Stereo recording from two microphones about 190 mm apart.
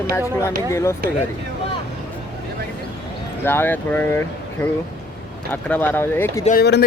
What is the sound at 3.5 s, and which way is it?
Speech, 10° left (ahead or behind).